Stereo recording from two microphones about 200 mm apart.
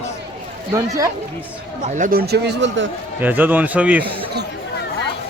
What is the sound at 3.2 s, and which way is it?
Speech, 10° right (ahead or behind).